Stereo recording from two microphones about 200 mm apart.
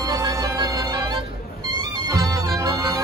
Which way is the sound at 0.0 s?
20° right (ahead or behind).